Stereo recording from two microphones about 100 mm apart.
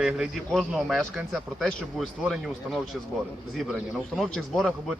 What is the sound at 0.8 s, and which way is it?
Speech, centre (ahead or behind).